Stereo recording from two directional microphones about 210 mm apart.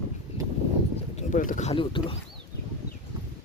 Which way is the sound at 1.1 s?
35° left (ahead or behind).